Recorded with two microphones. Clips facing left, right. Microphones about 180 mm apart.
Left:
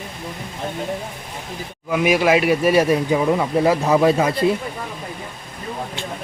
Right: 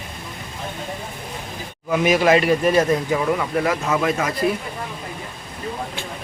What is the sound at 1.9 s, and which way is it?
Speech, 10° left (ahead or behind).